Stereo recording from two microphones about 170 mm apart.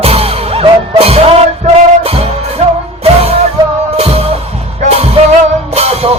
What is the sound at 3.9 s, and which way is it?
Music, 35° right (ahead or behind).